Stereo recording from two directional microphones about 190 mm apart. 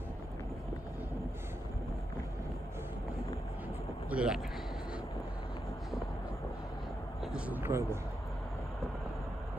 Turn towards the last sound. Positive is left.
turn(degrees=-15)  # may be behind; listen again after turning